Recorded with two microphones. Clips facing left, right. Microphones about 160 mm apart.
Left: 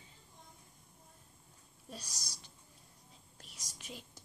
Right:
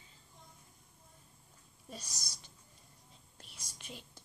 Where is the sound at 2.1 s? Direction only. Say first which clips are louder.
Even; 30° left (ahead or behind).